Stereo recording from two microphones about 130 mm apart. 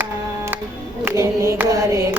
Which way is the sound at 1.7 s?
25° right (ahead or behind).